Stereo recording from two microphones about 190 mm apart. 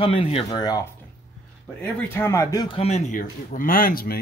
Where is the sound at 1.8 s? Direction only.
10° left (ahead or behind).